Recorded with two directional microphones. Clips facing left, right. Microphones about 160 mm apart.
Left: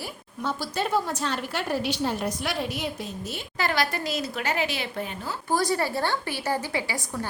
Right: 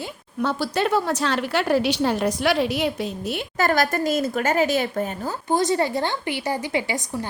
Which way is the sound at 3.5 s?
45° right (ahead or behind).